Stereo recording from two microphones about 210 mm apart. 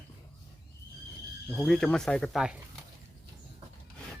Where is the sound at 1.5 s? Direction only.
5° left (ahead or behind).